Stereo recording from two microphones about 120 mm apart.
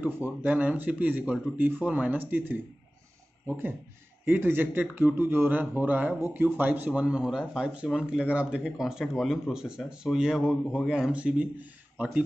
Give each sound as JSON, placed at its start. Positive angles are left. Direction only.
{"t": 0.0, "sound": "speech", "side_deg": -15}